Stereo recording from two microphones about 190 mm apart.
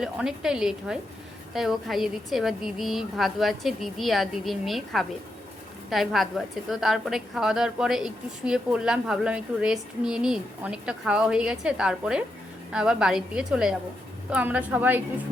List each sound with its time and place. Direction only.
0.0 s a woman's voice: 5° right (ahead or behind)